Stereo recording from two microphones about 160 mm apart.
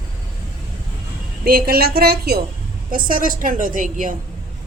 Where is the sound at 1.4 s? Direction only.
70° right (ahead or behind).